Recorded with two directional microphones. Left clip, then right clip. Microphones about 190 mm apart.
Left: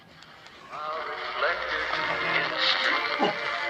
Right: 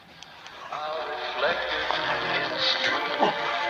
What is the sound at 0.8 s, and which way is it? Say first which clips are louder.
Radio: even; 45° left (ahead or behind).